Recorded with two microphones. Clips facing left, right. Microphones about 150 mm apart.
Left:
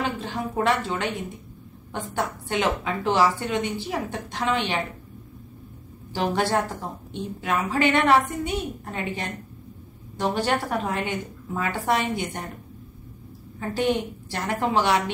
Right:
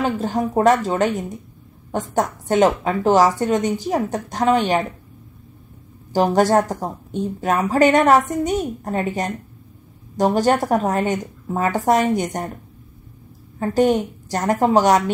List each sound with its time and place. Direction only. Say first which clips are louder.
0.0 s a woman's voice: right 7 dB; 45° right (ahead or behind)
6.1 s a woman's voice: right 8 dB; 40° right (ahead or behind)
13.6 s a woman's voice: right 7 dB; 40° right (ahead or behind)